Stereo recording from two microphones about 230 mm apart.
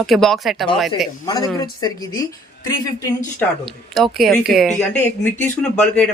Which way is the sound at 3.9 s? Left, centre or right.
Centre.